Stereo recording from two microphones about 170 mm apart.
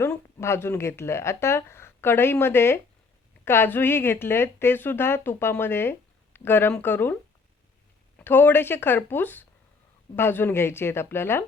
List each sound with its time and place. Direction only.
0.0 s a woman's voice: 15° left (ahead or behind)
8.2 s a woman's voice: 10° left (ahead or behind)